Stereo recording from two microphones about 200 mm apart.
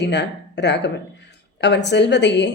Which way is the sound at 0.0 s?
60° left (ahead or behind).